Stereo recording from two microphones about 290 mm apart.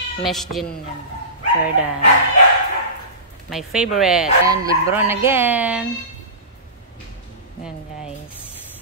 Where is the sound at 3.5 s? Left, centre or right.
Centre.